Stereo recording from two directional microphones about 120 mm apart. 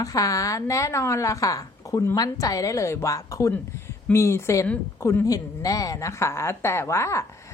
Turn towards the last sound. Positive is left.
turn(degrees=25)  # may be behind; listen again after turning